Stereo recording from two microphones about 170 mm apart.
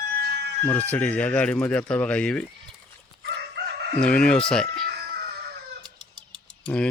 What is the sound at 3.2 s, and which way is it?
Chicken, 80° right.